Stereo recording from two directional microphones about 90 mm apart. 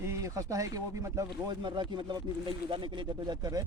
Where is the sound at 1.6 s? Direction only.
60° right (ahead or behind).